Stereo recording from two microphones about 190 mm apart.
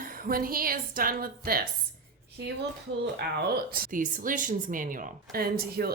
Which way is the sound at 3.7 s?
50° right (ahead or behind).